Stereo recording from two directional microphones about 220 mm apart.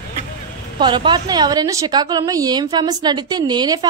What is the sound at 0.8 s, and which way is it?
A woman's voice, 20° right (ahead or behind).